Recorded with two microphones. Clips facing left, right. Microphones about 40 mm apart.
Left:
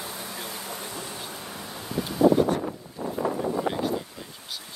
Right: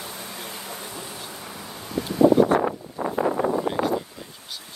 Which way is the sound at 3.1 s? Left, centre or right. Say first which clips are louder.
Right 4 dB; right.